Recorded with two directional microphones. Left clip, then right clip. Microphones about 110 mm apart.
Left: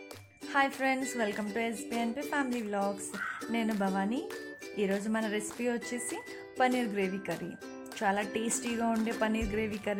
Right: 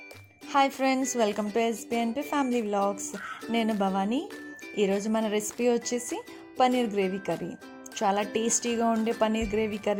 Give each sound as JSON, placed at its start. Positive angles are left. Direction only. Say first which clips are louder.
{"t": 0.5, "sound": "speech", "louder": "right 5 dB", "side_deg": -45}
{"t": 6.1, "sound": "speech", "louder": "right 4 dB", "side_deg": -40}